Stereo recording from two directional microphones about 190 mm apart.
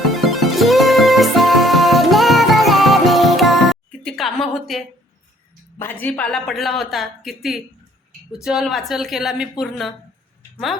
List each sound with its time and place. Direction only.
0.1 s music: centre (ahead or behind)
5.8 s speech: 10° left (ahead or behind)